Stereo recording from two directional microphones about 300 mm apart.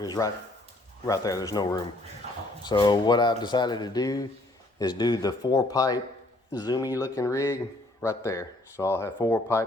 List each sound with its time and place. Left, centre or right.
0.0 s speech: centre